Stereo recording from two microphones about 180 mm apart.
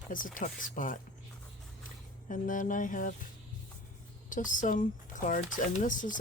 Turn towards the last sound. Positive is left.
turn(degrees=45)  # may be behind; listen again after turning